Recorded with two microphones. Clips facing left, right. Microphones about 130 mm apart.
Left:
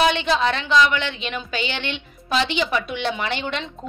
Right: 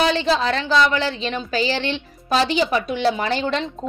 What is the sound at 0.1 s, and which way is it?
A woman's voice, 35° right (ahead or behind).